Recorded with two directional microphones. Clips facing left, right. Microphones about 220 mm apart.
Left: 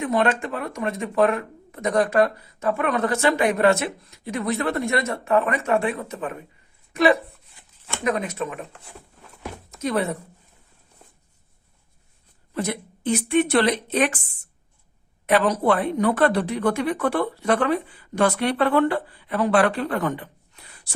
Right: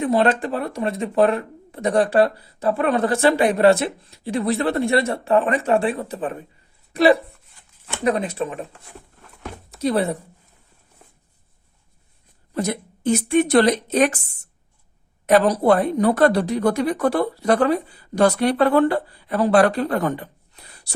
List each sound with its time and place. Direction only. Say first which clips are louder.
0.0 s speech: right 3 dB; 35° right (ahead or behind)
9.7 s speech: right 4 dB; 35° right (ahead or behind)
12.5 s speech: right 3 dB; 40° right (ahead or behind)